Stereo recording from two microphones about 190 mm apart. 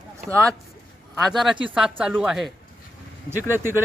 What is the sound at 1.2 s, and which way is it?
Speech, centre (ahead or behind).